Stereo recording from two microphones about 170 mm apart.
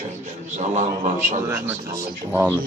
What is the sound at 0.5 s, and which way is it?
Speech, 45° right (ahead or behind).